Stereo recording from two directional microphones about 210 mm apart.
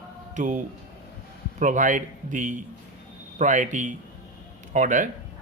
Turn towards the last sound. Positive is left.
turn(degrees=-40)  # may be behind; listen again after turning